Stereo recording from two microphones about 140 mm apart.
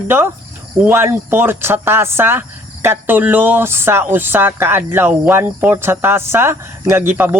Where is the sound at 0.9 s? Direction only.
15° right (ahead or behind).